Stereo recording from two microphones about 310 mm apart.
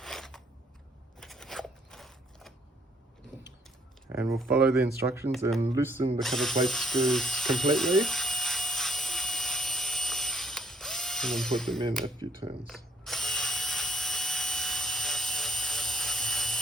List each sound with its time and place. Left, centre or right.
0.0 s biting: centre
1.2 s scissors: centre
4.1 s speech: centre
6.2 s ratchet: centre
12.0 s speech: centre
12.6 s drill: centre